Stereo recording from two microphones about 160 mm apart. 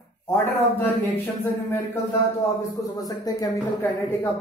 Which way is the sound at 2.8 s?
20° left (ahead or behind).